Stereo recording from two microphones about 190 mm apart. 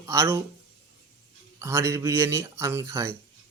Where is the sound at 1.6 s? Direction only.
15° right (ahead or behind).